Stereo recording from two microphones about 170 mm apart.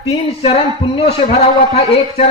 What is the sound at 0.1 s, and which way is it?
A man's voice, 35° left (ahead or behind).